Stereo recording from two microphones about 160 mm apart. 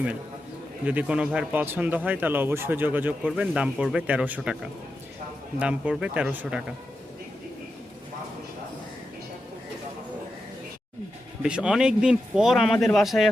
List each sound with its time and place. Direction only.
0.9 s a man's voice: 10° right (ahead or behind)
11.4 s speech: 5° right (ahead or behind)